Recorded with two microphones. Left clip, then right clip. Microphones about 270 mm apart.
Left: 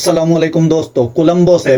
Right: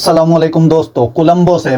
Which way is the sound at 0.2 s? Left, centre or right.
Right.